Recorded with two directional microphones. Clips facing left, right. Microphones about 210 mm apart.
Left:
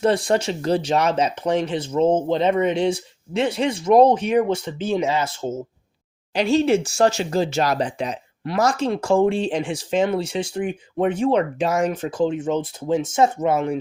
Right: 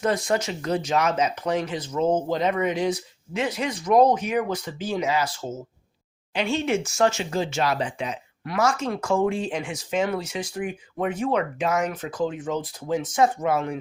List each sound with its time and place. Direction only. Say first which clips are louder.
0.0 s speech: left 5 dB; 30° left (ahead or behind)
6.3 s speech: left 6 dB; 40° left (ahead or behind)